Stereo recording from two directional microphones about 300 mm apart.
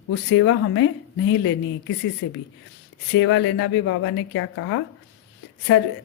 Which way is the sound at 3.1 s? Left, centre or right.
Left.